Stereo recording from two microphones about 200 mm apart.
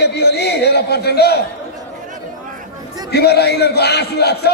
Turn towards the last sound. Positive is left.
turn(degrees=55)  # may be behind; listen again after turning